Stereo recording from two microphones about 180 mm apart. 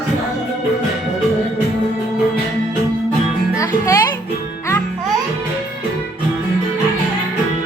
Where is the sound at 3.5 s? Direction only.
15° left (ahead or behind).